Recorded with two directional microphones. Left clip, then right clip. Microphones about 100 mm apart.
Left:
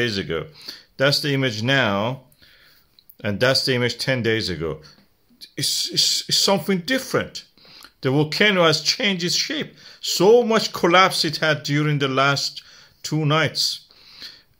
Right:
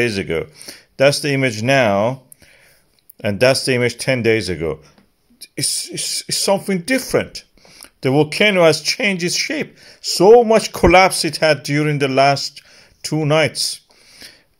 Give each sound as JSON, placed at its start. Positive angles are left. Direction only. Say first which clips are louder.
{"t": 0.0, "sound": "speech", "louder": "right 5 dB", "side_deg": -35}
{"t": 3.2, "sound": "speech", "louder": "right 5 dB", "side_deg": -30}
{"t": 10.2, "sound": "speech", "louder": "right 6 dB", "side_deg": 0}
{"t": 10.5, "sound": "speech", "louder": "right 5 dB", "side_deg": -35}
{"t": 14.0, "sound": "a sound", "louder": "left 1 dB", "side_deg": -30}